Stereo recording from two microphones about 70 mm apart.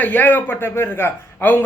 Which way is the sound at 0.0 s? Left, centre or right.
Left.